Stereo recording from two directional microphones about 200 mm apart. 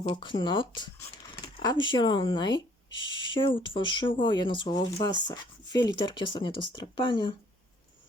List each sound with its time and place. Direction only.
0.1 s speech: 25° left (ahead or behind)